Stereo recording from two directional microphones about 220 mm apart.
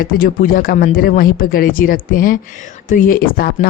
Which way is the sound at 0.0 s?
40° left (ahead or behind).